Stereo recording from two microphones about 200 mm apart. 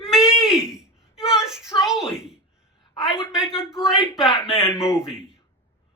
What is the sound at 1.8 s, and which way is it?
Speech, 5° right (ahead or behind).